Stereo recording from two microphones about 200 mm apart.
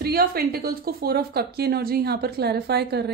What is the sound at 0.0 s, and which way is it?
A woman's voice, 50° right (ahead or behind).